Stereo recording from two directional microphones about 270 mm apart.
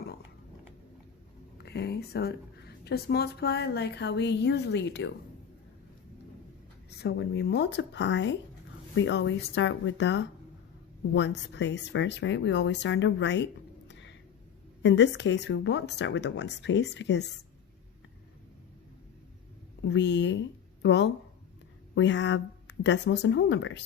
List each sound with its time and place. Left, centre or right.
1.6 s speech: left
7.0 s speech: left
19.8 s speech: left